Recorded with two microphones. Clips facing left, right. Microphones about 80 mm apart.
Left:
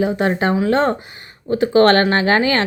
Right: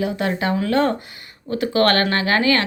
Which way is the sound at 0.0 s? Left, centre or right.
Left.